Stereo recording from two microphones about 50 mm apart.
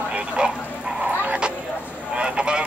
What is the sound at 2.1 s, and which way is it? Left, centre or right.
Goose, right.